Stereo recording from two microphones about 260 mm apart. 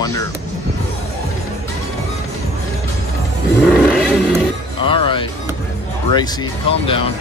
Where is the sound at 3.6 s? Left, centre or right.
Centre.